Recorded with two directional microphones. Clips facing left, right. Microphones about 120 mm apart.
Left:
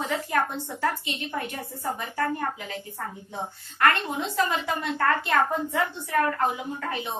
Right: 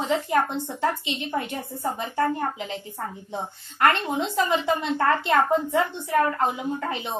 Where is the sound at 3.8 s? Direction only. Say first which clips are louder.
Right 2 dB; 25° right (ahead or behind).